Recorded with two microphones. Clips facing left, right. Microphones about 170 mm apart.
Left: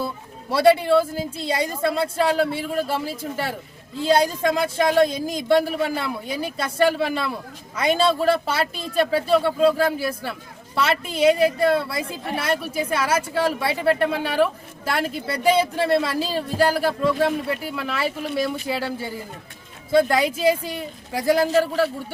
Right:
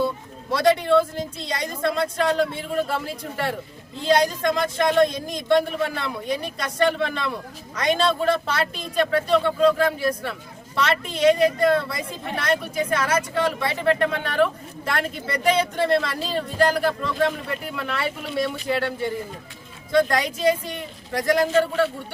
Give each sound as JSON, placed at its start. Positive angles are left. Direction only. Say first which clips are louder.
{"t": 0.5, "sound": "speech", "louder": "left 2 dB", "side_deg": 5}
{"t": 9.6, "sound": "speech", "louder": "even", "side_deg": 30}
{"t": 10.0, "sound": "a woman's voice", "louder": "right 2 dB", "side_deg": 5}